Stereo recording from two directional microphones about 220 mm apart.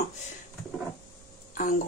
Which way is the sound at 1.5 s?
35° left (ahead or behind).